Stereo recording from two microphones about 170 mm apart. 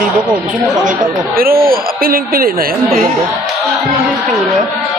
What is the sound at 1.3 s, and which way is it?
A woman's voice, 60° right (ahead or behind).